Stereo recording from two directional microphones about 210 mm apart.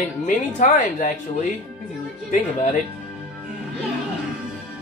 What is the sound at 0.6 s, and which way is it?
Speech, 35° left (ahead or behind).